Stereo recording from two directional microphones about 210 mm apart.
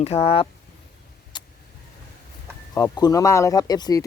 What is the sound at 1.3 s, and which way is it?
Vehicle, 20° left (ahead or behind).